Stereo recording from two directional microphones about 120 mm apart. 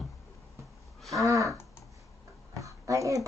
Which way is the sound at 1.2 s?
25° right (ahead or behind).